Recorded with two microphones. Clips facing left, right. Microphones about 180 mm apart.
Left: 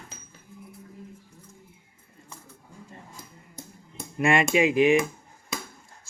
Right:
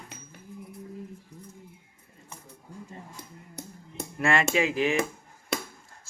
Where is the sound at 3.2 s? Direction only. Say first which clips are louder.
Right 2 dB; 70° right (ahead or behind).